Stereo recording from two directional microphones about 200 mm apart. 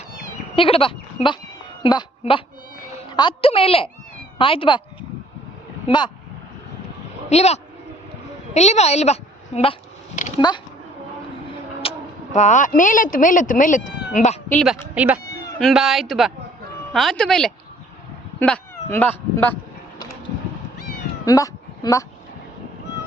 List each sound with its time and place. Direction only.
0.5 s a woman's voice: 25° left (ahead or behind)
7.3 s a woman's voice: 35° left (ahead or behind)
10.2 s a sound: 35° left (ahead or behind)
11.8 s speech: 30° left (ahead or behind)
14.5 s speech: centre (ahead or behind)
21.2 s a sound: 15° left (ahead or behind)